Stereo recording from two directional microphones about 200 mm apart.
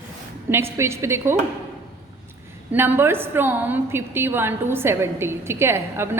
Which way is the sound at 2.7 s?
10° right (ahead or behind).